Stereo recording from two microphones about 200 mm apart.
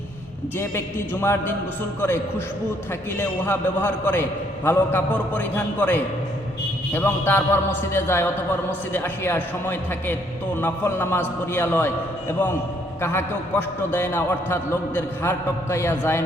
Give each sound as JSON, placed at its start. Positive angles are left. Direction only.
{"t": 0.6, "sound": "a man's voice", "side_deg": 10}
{"t": 3.2, "sound": "a man's voice", "side_deg": 10}
{"t": 13.0, "sound": "a man's voice", "side_deg": 10}